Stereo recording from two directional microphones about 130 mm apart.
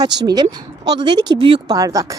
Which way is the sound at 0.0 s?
30° right (ahead or behind).